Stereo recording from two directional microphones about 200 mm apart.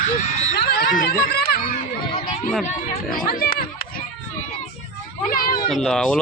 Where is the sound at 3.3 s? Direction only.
45° left (ahead or behind).